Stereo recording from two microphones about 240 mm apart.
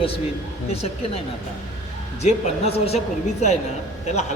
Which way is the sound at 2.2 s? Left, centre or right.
Left.